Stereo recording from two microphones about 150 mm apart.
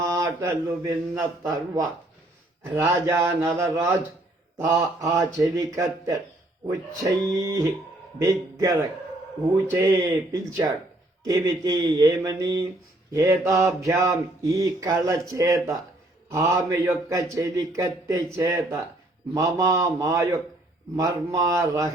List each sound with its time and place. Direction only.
0.0 s mantra: 20° right (ahead or behind)
9.6 s speech: 20° right (ahead or behind)
11.3 s mantra: 25° right (ahead or behind)